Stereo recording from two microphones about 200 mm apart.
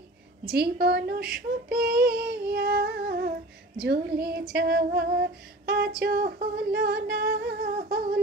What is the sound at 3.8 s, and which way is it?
Speech, 50° right (ahead or behind).